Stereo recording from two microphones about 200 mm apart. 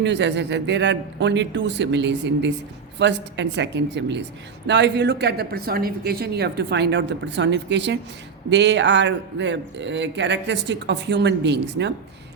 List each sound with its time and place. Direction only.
0.0 s a woman's voice: 60° right (ahead or behind)